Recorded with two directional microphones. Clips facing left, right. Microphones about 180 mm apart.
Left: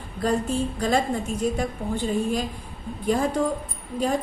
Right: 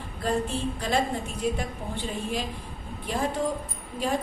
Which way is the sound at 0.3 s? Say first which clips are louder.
Left 3 dB; 45° left (ahead or behind).